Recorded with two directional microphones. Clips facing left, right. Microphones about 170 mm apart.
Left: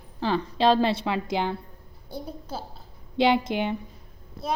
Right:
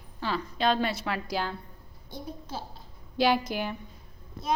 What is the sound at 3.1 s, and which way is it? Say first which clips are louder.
Speech: left 3 dB; 25° left (ahead or behind).